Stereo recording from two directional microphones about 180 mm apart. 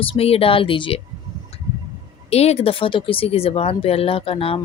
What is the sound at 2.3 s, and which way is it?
Speech, 35° left (ahead or behind).